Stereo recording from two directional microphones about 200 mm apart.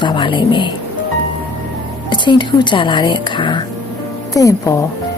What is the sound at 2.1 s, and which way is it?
A woman's voice, 25° left (ahead or behind).